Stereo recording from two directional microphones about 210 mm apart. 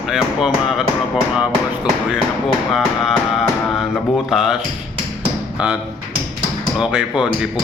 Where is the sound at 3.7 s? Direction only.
Centre (ahead or behind).